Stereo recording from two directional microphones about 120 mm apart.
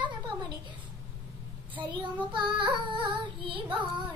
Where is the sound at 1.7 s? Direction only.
40° right (ahead or behind).